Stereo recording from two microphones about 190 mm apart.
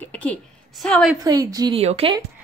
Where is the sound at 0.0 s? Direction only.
5° left (ahead or behind).